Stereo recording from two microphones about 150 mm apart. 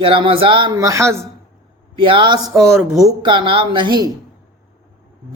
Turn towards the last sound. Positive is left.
turn(degrees=-30)  # may be behind; listen again after turning